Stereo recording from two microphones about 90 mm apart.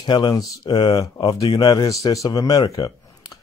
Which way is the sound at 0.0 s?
55° left (ahead or behind).